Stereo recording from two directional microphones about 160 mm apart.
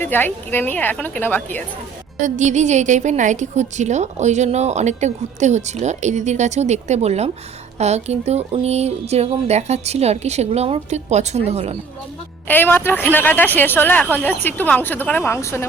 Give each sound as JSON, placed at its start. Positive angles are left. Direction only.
{"t": 0.0, "sound": "speech", "side_deg": 10}
{"t": 2.2, "sound": "a woman's voice", "side_deg": -50}
{"t": 12.5, "sound": "speech", "side_deg": 10}